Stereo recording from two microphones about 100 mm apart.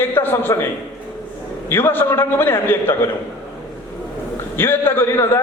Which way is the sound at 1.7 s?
20° left (ahead or behind).